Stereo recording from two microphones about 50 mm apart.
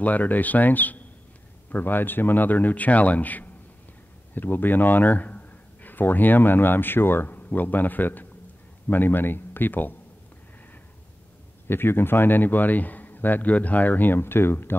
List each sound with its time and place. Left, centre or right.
0.0 s a man's voice: left
11.6 s a man's voice: left